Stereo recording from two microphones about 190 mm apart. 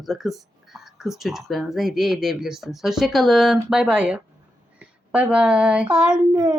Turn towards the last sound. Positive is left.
turn(degrees=-20)  # may be behind; listen again after turning